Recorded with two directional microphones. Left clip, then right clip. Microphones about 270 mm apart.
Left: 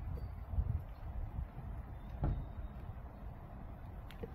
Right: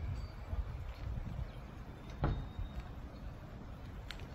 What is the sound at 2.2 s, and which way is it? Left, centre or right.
Vehicle, left.